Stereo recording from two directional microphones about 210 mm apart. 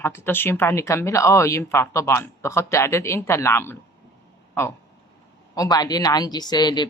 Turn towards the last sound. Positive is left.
turn(degrees=20)  # may be behind; listen again after turning